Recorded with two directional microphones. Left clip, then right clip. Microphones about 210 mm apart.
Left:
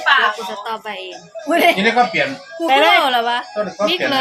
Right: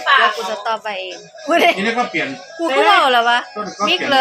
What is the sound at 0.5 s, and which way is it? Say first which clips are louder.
A woman's voice: right 4 dB; 10° right (ahead or behind).